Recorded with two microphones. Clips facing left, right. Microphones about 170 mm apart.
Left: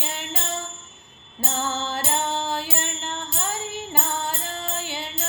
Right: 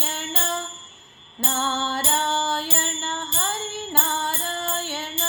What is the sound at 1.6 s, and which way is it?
Music, 15° left (ahead or behind).